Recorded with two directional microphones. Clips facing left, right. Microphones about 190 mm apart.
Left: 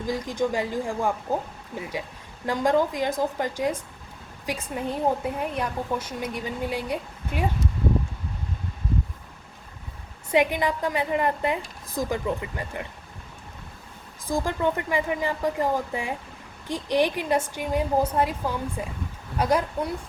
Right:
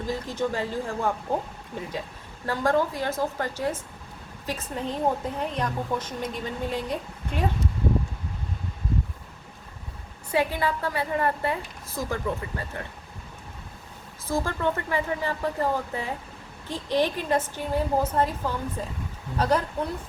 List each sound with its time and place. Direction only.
0.1 s a woman's voice: 15° left (ahead or behind)
10.3 s a woman's voice: 15° left (ahead or behind)
14.3 s a woman's voice: 15° left (ahead or behind)